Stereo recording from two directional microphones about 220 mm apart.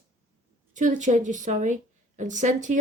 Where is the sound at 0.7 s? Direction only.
35° right (ahead or behind).